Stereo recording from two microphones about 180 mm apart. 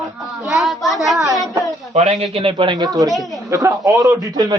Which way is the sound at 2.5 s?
25° right (ahead or behind).